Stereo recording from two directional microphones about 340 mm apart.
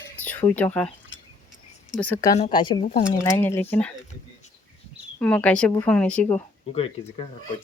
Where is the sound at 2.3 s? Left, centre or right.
Centre.